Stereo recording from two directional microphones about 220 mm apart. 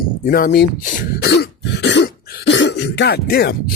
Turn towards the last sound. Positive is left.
turn(degrees=45)  # may be behind; listen again after turning